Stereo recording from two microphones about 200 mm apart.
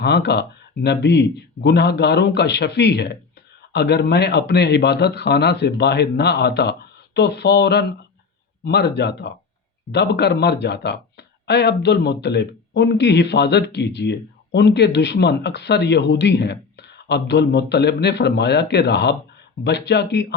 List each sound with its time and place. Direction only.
0.0 s speech: 55° left (ahead or behind)